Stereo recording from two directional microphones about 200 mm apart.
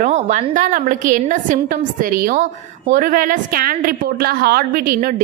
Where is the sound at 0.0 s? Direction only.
40° right (ahead or behind).